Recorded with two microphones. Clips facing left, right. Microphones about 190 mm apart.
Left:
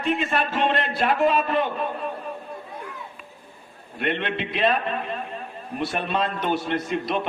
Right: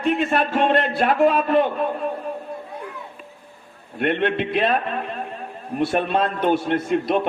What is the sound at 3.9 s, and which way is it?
Speech, 50° right (ahead or behind).